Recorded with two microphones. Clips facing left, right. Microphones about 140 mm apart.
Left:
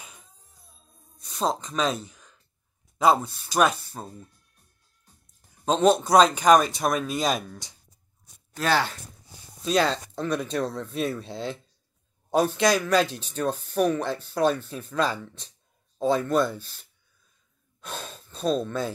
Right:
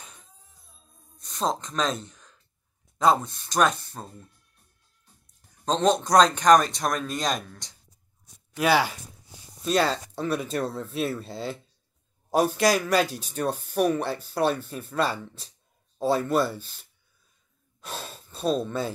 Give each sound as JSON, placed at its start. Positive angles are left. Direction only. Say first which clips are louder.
{"t": 1.1, "sound": "speech", "louder": "left 1 dB", "side_deg": 0}
{"t": 5.7, "sound": "speech", "louder": "left 2 dB", "side_deg": 5}
{"t": 8.5, "sound": "speech", "louder": "right 2 dB", "side_deg": -10}
{"t": 17.7, "sound": "sigh", "louder": "even", "side_deg": -5}